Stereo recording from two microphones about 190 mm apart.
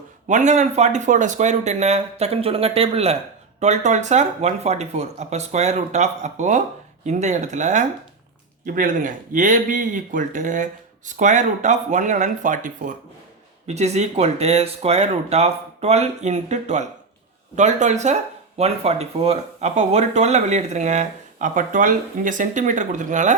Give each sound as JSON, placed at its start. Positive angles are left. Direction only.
{"t": 0.3, "sound": "speech", "side_deg": -40}